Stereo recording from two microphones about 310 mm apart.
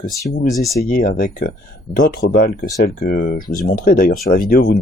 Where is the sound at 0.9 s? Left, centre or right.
Left.